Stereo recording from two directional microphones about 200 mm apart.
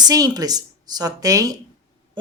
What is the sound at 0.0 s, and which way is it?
Speech, 20° right (ahead or behind).